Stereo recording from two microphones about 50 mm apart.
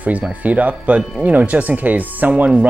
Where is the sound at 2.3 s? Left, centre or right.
Right.